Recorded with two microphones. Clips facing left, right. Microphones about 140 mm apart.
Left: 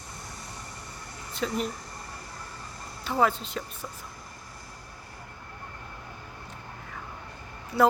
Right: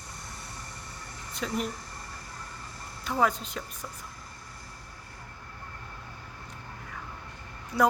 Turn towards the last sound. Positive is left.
turn(degrees=25)  # may be behind; listen again after turning